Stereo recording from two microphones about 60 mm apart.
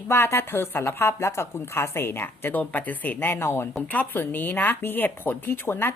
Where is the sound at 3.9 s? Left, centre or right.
Left.